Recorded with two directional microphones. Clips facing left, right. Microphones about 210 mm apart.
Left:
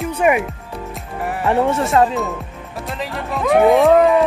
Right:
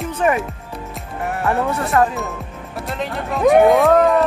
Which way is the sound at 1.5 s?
20° left (ahead or behind).